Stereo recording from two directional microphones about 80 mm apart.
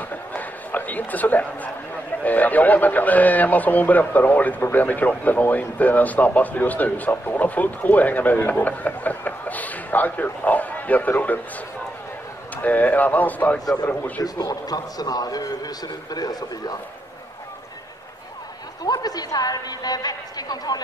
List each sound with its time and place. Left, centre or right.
0.1 s a sound: left
2.2 s speech: left
4.6 s speech: left
4.8 s speech: left
12.6 s speech: left
14.2 s a man's voice: left
18.9 s a woman's voice: left